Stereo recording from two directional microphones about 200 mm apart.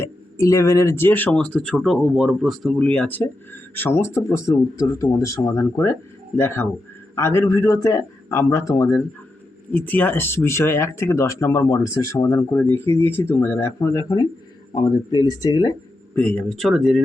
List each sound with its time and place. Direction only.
0.3 s speech: 15° left (ahead or behind)
16.1 s speech: 5° left (ahead or behind)